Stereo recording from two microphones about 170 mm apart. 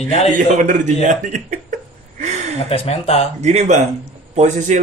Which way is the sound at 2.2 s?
40° right (ahead or behind).